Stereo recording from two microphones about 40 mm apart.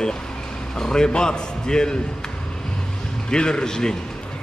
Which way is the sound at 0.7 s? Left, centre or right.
Centre.